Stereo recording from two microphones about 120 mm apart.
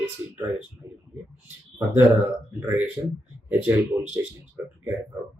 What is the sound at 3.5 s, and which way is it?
Speech, 15° right (ahead or behind).